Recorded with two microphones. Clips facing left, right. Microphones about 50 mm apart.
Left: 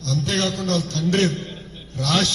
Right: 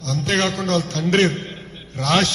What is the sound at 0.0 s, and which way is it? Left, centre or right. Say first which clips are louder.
A man's voice: right 2 dB; right.